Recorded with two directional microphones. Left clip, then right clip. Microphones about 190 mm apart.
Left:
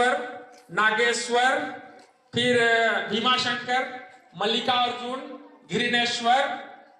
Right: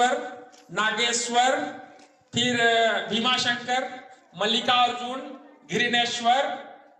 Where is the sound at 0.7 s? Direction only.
40° right (ahead or behind); by 3.8 s 20° right (ahead or behind).